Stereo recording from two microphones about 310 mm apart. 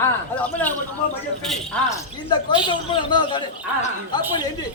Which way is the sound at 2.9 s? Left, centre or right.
Centre.